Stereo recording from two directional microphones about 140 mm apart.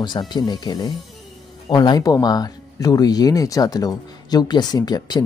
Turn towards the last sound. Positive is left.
turn(degrees=30)  # may be behind; listen again after turning